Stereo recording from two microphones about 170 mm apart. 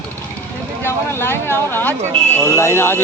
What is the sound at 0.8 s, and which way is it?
Speech, 15° left (ahead or behind).